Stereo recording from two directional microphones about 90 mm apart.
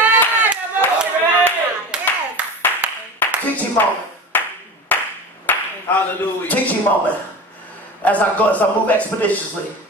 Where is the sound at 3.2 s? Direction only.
15° left (ahead or behind).